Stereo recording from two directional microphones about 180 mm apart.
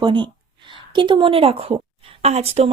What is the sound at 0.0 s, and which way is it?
A woman's voice, 25° right (ahead or behind).